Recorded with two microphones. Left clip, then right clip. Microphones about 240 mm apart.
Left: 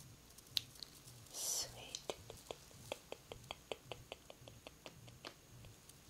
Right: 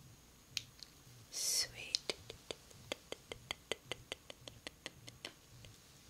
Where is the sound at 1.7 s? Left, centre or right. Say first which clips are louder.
Right 7 dB; centre.